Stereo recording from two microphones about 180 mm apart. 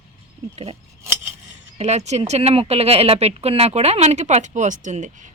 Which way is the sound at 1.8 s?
40° right (ahead or behind).